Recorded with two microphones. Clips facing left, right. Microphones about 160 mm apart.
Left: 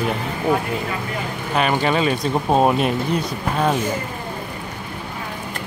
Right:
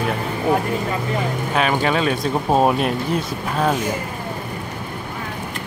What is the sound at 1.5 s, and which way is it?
Speech, centre (ahead or behind).